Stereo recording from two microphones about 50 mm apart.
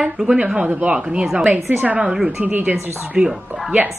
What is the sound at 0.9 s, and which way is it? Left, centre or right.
Speech, centre.